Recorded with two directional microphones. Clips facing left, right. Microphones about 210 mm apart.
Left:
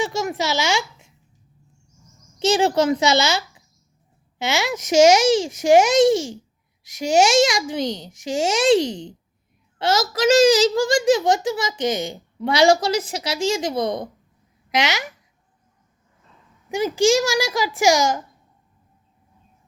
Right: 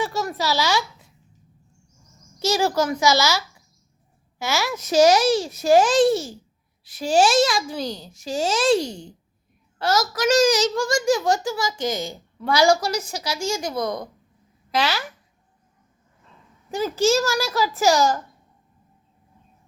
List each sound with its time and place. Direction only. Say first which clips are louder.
0.2 s a child's voice: left 1 dB; 20° left (ahead or behind)
2.6 s a child's voice: left 3 dB; 25° left (ahead or behind)
7.9 s a child's voice: left 3 dB; 85° left
8.2 s a child's voice: left 2 dB; 20° left (ahead or behind)
16.6 s speech: left 2 dB; 15° left (ahead or behind)